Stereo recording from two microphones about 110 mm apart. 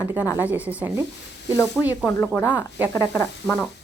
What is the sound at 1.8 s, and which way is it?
Speech, 10° left (ahead or behind).